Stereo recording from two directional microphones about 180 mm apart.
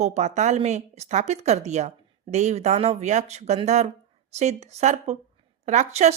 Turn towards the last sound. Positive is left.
turn(degrees=-40)  # may be behind; listen again after turning